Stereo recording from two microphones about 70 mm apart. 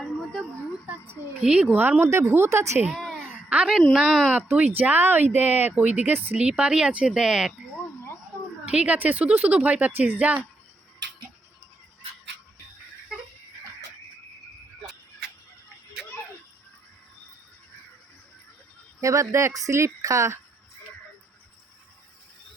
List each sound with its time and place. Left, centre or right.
1.4 s speech: centre
1.7 s speech: right
2.9 s a sound: centre
3.5 s speech: centre
4.3 s speech: right
6.6 s speech: centre
8.6 s speech: centre
13.1 s a sound: centre
19.0 s speech: right